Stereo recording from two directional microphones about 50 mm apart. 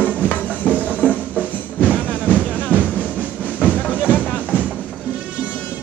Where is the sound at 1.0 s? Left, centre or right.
Right.